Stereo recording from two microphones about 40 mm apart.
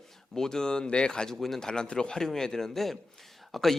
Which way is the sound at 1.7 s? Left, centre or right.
Centre.